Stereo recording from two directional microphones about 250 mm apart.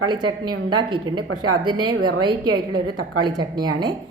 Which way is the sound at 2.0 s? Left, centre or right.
Right.